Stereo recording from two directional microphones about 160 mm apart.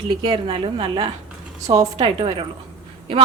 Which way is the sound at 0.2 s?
35° right (ahead or behind).